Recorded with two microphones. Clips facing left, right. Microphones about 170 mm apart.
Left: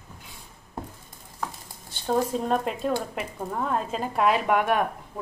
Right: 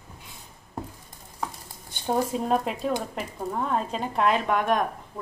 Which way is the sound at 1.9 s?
15° right (ahead or behind).